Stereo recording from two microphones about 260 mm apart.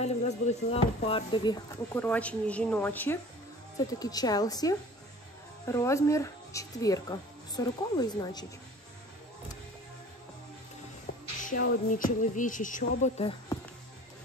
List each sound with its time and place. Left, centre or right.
0.0 s speech: left
2.0 s a woman's voice: centre
11.4 s speech: left